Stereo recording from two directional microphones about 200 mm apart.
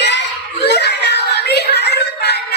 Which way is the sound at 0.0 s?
60° left (ahead or behind).